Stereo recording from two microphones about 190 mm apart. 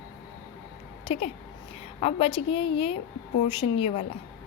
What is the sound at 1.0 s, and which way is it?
A woman's voice, 30° left (ahead or behind).